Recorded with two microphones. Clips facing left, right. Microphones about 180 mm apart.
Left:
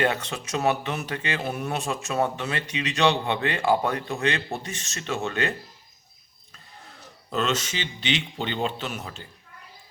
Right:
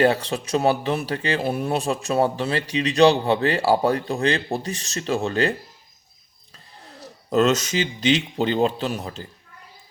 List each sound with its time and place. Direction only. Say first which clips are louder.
0.0 s speech: right 6 dB; 35° right (ahead or behind)
7.0 s speech: right 9 dB; 40° right (ahead or behind)